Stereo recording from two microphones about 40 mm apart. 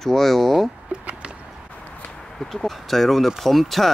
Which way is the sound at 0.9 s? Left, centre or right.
Right.